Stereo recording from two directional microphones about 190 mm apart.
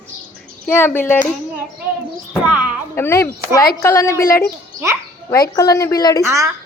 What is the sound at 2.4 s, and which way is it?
Speech, 5° right (ahead or behind).